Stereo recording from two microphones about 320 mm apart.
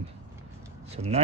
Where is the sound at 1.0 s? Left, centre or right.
Centre.